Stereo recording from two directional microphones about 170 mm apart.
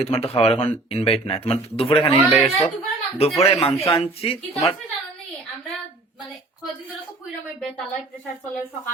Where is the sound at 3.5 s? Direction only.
35° left (ahead or behind).